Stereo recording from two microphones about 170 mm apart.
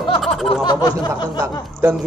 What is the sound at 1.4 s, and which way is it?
Speech, 15° right (ahead or behind).